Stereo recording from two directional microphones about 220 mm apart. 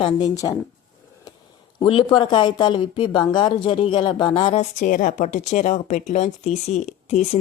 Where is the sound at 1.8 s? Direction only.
25° left (ahead or behind).